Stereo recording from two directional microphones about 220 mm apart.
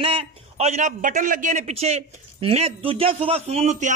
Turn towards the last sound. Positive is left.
turn(degrees=-30)  # may be behind; listen again after turning